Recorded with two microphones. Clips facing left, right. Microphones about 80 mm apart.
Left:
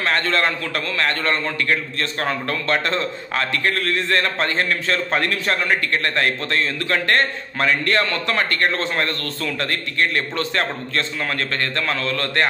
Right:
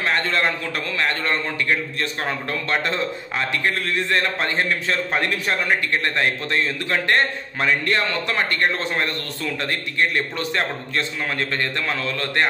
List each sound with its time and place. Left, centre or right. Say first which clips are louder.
0.0 s a man's voice: left 1 dB; centre